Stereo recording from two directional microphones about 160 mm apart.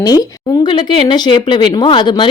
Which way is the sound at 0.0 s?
25° left (ahead or behind).